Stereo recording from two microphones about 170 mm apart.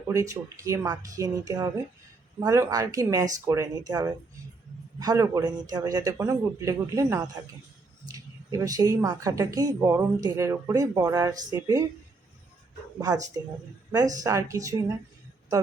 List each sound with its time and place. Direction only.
0.1 s a woman's voice: 20° right (ahead or behind)
13.0 s a woman's voice: 20° right (ahead or behind)